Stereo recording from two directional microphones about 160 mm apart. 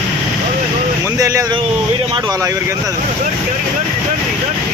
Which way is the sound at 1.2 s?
20° right (ahead or behind).